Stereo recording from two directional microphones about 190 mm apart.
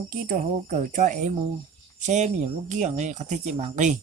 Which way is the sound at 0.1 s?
45° right (ahead or behind).